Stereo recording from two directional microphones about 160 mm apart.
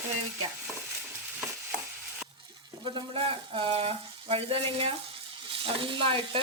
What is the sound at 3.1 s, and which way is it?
Speech, 35° right (ahead or behind).